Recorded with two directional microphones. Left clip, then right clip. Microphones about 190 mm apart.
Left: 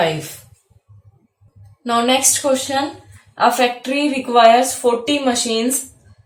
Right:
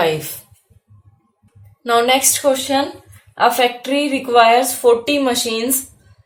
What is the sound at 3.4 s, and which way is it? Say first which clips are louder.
Speech: right 1 dB; 35° right (ahead or behind).